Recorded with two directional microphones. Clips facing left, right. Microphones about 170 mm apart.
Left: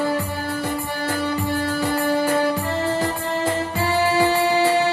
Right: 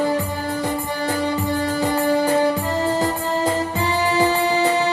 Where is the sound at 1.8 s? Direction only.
20° right (ahead or behind).